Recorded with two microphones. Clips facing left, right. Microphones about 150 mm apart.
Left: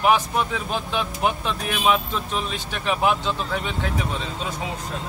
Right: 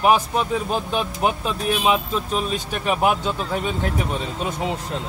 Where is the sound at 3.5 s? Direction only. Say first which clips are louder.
Right 3 dB; 40° right (ahead or behind).